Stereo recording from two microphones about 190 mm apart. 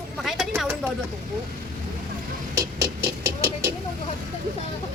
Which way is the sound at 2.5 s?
15° right (ahead or behind).